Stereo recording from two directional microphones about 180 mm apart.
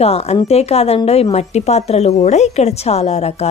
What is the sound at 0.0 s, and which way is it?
A woman's voice, 35° left (ahead or behind).